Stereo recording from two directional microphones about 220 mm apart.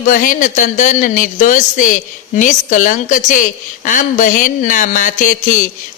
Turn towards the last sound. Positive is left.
turn(degrees=35)  # may be behind; listen again after turning